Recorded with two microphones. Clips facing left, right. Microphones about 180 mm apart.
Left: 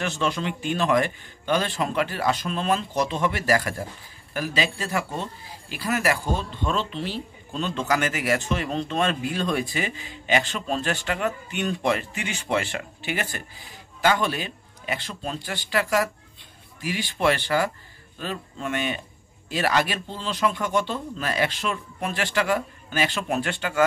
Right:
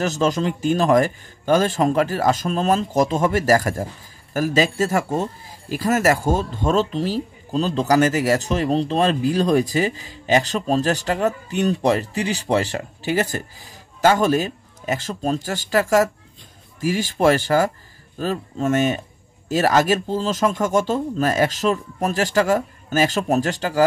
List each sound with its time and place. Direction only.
0.0 s speech: 40° right (ahead or behind)